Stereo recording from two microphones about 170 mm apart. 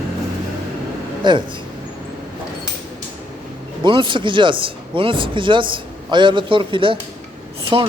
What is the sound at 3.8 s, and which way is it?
A man's voice, 30° right (ahead or behind).